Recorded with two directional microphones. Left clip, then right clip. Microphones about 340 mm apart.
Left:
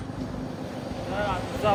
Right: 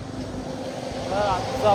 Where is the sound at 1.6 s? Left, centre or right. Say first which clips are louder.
Right 4 dB; centre.